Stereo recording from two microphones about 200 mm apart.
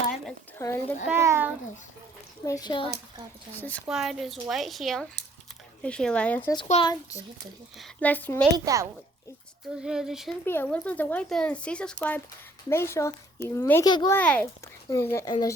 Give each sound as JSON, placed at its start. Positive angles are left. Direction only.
{"t": 0.6, "sound": "speech", "side_deg": 10}
{"t": 1.0, "sound": "a child's voice", "side_deg": -10}
{"t": 2.4, "sound": "speech", "side_deg": 15}
{"t": 3.5, "sound": "a woman's voice", "side_deg": 10}
{"t": 6.8, "sound": "a child's voice", "side_deg": 30}
{"t": 7.8, "sound": "speech", "side_deg": 10}
{"t": 8.5, "sound": "a child's voice", "side_deg": -15}
{"t": 9.8, "sound": "a woman's voice", "side_deg": -5}
{"t": 10.4, "sound": "speech", "side_deg": 10}
{"t": 14.2, "sound": "speech", "side_deg": 5}